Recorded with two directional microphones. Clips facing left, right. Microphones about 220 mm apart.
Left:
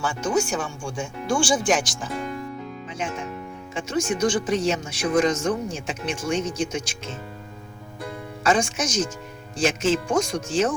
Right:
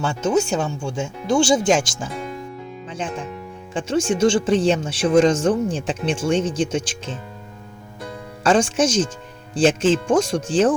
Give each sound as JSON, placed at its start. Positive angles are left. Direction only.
{"t": 0.0, "sound": "speech", "side_deg": -25}
{"t": 8.4, "sound": "speech", "side_deg": -30}